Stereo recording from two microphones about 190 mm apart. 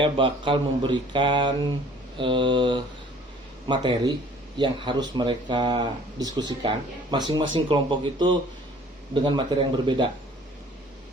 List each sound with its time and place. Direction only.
0.0 s speech: 25° right (ahead or behind)